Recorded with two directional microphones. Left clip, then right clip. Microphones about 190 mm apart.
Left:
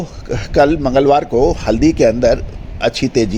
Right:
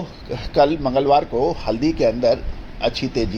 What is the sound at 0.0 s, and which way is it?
A man's voice, 45° left (ahead or behind).